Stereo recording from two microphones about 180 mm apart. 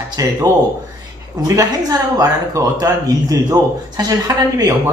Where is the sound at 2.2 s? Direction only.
20° right (ahead or behind).